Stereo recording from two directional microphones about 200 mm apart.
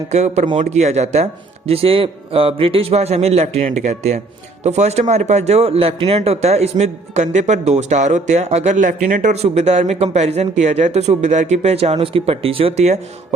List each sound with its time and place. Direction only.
0.1 s a man's voice: 35° right (ahead or behind)